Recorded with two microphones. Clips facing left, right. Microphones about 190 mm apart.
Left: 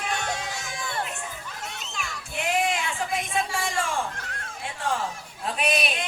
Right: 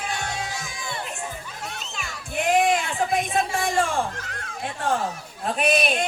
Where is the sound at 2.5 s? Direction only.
45° right (ahead or behind).